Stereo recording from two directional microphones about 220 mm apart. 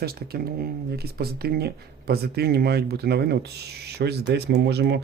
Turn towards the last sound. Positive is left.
turn(degrees=-50)  # may be behind; listen again after turning